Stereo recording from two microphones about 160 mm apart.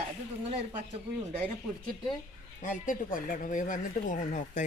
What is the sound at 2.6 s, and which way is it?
Speech, 55° left (ahead or behind).